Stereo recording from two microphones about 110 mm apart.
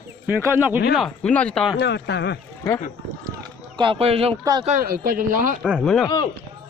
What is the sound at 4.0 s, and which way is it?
Speech, 65° right (ahead or behind).